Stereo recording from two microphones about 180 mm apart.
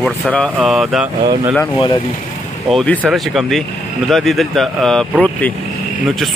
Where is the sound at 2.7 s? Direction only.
Centre (ahead or behind).